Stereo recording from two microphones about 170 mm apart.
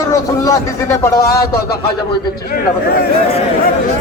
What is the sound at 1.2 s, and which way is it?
Speech, 65° left (ahead or behind).